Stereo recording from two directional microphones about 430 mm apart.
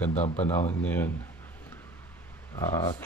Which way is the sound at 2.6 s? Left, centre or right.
Centre.